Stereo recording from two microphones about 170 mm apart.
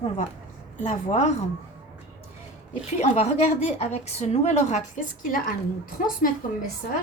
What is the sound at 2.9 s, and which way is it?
A woman's voice, 40° left (ahead or behind).